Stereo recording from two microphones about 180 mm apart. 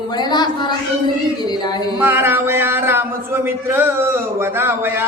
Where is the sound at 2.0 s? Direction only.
10° right (ahead or behind).